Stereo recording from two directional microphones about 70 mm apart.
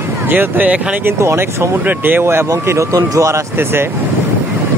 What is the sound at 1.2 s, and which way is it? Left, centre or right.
Speech, right.